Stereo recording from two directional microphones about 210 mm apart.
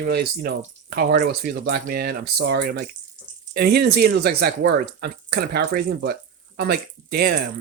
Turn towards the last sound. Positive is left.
turn(degrees=-50)  # may be behind; listen again after turning